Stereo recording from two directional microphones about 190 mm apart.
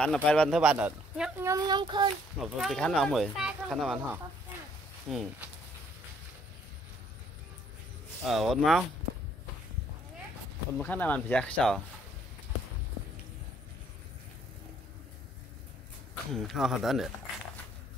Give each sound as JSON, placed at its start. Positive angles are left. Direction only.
{"t": 0.0, "sound": "speech", "side_deg": 5}
{"t": 1.4, "sound": "speech", "side_deg": -20}
{"t": 2.3, "sound": "speech", "side_deg": 0}
{"t": 8.3, "sound": "speech", "side_deg": 0}
{"t": 10.8, "sound": "speech", "side_deg": 10}
{"t": 16.3, "sound": "speech", "side_deg": 0}